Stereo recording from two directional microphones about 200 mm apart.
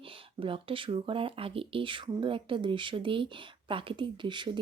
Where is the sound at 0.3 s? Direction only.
25° right (ahead or behind).